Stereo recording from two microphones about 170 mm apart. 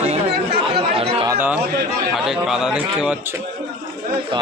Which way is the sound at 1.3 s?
10° right (ahead or behind).